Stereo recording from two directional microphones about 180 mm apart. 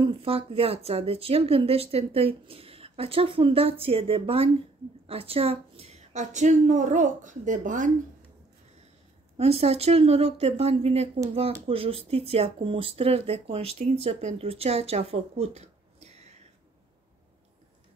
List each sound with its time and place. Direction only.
0.0 s speech: 30° right (ahead or behind)
9.4 s speech: 35° right (ahead or behind)